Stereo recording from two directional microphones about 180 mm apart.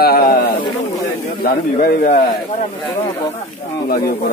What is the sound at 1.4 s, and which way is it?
Speech, 55° left (ahead or behind).